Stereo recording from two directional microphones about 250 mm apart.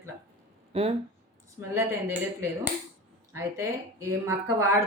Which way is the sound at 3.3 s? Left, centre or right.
Centre.